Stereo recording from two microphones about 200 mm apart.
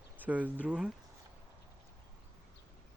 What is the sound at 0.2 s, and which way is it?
Speech, 10° right (ahead or behind).